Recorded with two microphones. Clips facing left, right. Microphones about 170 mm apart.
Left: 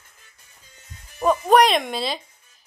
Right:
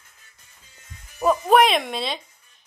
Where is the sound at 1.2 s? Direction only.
Centre (ahead or behind).